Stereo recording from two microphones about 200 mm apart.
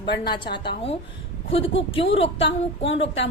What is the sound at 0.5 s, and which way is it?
Speech, 25° left (ahead or behind).